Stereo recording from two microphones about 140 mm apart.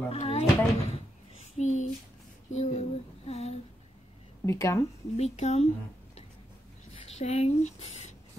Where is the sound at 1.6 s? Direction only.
60° left (ahead or behind).